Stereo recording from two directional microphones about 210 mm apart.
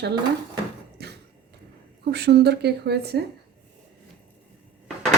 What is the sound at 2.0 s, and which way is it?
A woman's voice, 50° right (ahead or behind).